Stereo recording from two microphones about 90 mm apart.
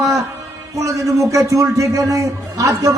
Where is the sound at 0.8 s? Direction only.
35° right (ahead or behind).